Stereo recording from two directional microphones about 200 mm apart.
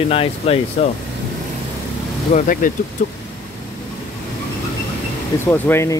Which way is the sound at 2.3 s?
40° left (ahead or behind).